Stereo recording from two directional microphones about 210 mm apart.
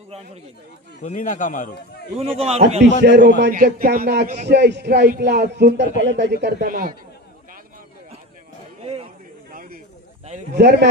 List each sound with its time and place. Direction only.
1.0 s a man's voice: 35° left (ahead or behind)
2.1 s a man's voice: 30° right (ahead or behind)
3.0 s a man's voice: 55° right (ahead or behind)
3.4 s speech: 40° right (ahead or behind)
6.4 s speech: 45° right (ahead or behind)
9.5 s a sound: 40° right (ahead or behind)
10.2 s a man's voice: 35° right (ahead or behind)
10.6 s speech: 50° right (ahead or behind)